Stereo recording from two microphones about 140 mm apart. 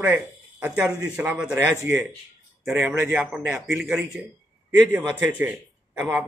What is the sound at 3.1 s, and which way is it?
Speech, centre (ahead or behind).